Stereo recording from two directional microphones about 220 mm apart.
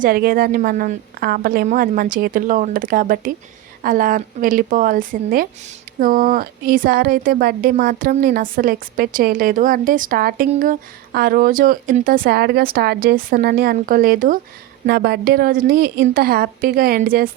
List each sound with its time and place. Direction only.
0.0 s a woman's voice: 40° right (ahead or behind)